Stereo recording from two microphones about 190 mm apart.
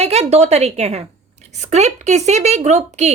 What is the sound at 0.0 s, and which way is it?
A woman's voice, 35° right (ahead or behind).